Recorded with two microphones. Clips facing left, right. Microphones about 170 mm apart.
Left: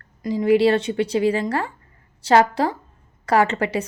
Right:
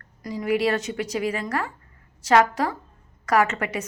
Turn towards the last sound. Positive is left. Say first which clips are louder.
# left 3 dB
turn(degrees=30)  # may be behind; listen again after turning